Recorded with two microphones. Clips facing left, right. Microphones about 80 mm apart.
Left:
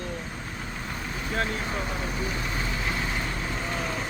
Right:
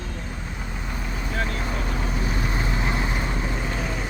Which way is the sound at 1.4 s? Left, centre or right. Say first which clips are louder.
Even; centre.